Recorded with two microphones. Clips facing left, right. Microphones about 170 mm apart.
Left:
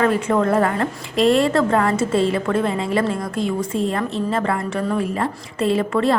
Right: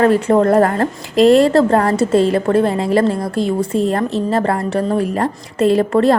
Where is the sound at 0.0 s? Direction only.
35° right (ahead or behind).